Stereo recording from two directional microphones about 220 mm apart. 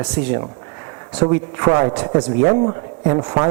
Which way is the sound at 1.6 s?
30° right (ahead or behind).